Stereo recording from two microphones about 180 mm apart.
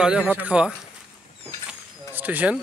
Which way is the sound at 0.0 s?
5° right (ahead or behind).